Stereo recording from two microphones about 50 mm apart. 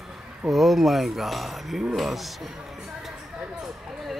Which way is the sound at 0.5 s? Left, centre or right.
Centre.